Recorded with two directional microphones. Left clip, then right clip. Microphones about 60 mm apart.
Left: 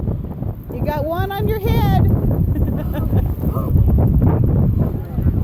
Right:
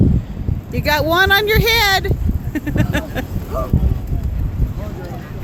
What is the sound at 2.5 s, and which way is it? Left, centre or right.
Vehicle, right.